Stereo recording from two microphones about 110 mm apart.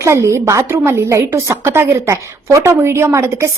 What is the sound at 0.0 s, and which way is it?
A woman's voice, 25° right (ahead or behind).